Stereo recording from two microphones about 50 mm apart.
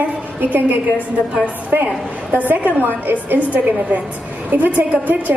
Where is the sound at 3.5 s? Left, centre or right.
Right.